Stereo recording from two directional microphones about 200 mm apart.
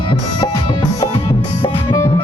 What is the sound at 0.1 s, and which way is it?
Music, 25° left (ahead or behind).